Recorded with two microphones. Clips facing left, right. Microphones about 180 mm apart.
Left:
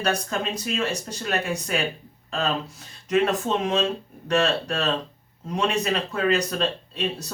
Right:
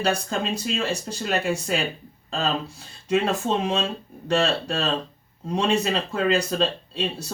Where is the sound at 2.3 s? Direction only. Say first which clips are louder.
Even; 30° right (ahead or behind).